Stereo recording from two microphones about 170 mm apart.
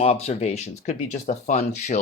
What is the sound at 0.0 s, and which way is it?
Speech, 35° left (ahead or behind).